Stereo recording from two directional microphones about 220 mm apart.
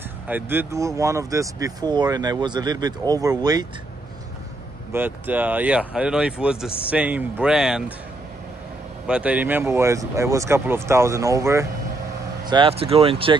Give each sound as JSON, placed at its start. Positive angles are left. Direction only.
{"t": 0.3, "sound": "speech", "side_deg": -10}
{"t": 4.9, "sound": "speech", "side_deg": -10}
{"t": 9.0, "sound": "speech", "side_deg": -5}